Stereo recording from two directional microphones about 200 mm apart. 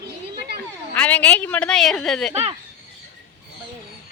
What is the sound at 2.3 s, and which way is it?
Speech, 30° right (ahead or behind).